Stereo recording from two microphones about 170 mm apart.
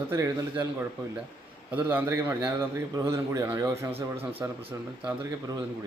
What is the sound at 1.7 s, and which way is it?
A man's voice, 10° right (ahead or behind).